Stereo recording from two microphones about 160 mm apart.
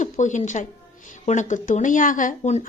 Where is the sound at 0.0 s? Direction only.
50° left (ahead or behind).